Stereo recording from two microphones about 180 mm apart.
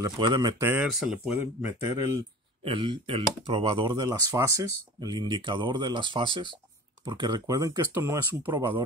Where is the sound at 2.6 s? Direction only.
30° right (ahead or behind).